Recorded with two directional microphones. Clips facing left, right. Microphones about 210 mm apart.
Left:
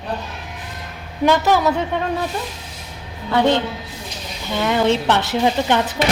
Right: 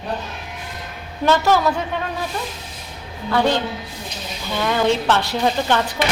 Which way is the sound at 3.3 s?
20° left (ahead or behind).